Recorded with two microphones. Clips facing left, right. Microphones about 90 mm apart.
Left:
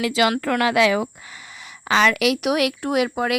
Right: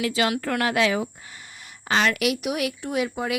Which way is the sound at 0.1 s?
90° left.